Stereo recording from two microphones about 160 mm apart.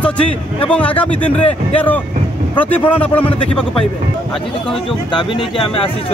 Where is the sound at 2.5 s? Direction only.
10° left (ahead or behind).